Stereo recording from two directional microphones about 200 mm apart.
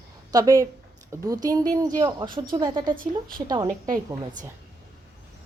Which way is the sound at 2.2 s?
45° right (ahead or behind).